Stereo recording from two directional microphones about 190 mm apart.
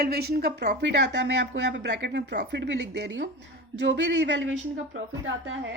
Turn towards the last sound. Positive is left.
turn(degrees=-90)